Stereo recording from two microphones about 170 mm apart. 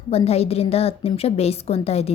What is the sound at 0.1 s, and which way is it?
A woman's voice, 35° left (ahead or behind).